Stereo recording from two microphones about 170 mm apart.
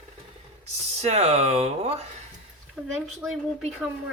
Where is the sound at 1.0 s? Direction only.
40° right (ahead or behind).